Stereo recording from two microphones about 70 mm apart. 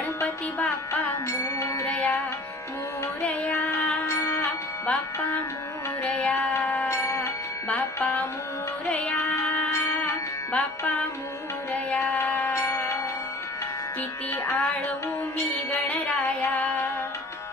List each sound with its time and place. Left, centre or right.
1.9 s music: left
3.2 s music: left
4.0 s music: left
6.1 s child singing: left
6.6 s music: left
6.9 s music: left
7.7 s music: left
9.7 s music: left
11.7 s music: left
12.5 s music: left
15.9 s music: centre